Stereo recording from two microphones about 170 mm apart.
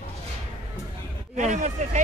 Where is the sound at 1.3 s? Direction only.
45° right (ahead or behind).